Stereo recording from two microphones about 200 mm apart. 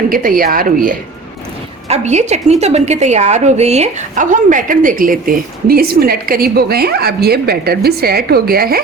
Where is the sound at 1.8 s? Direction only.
35° right (ahead or behind).